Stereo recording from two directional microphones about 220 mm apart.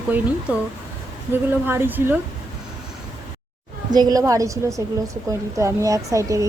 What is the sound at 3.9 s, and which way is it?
A woman's voice, 20° right (ahead or behind).